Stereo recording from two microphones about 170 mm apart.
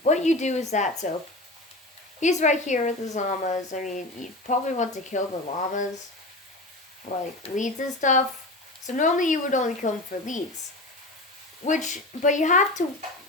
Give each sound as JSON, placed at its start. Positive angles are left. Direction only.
{"t": 0.0, "sound": "speech", "side_deg": 45}
{"t": 2.2, "sound": "speech", "side_deg": 45}
{"t": 7.1, "sound": "speech", "side_deg": 50}
{"t": 11.6, "sound": "speech", "side_deg": 45}